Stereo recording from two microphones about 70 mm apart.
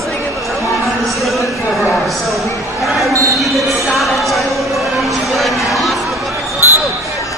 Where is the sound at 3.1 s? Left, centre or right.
Right.